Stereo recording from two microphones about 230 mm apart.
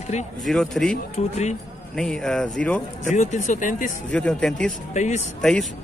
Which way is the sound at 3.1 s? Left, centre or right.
Left.